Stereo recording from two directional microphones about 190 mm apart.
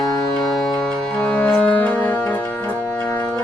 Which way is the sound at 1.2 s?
5° left (ahead or behind).